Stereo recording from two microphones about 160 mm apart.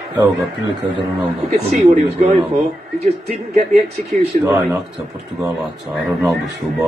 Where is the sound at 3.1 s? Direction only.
40° right (ahead or behind).